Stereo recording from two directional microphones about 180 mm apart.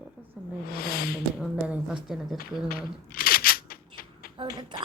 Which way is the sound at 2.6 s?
55° left (ahead or behind).